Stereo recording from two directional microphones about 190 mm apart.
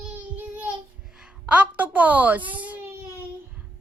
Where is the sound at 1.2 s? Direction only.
5° right (ahead or behind).